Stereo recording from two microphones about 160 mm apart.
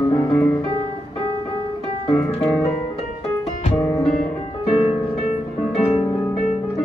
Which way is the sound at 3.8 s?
15° left (ahead or behind).